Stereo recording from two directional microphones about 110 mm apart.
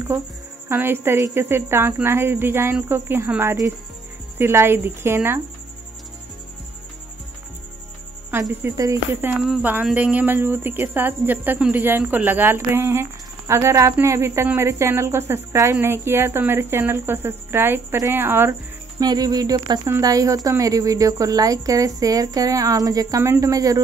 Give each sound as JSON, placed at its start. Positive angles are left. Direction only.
{"t": 0.7, "sound": "a woman's voice", "side_deg": -20}
{"t": 8.3, "sound": "speech", "side_deg": -20}
{"t": 8.7, "sound": "a woman's voice", "side_deg": -30}
{"t": 9.2, "sound": "a woman's voice", "side_deg": -20}
{"t": 18.9, "sound": "a woman's voice", "side_deg": -35}